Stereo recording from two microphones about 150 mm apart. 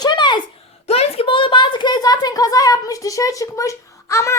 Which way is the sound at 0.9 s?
40° left (ahead or behind).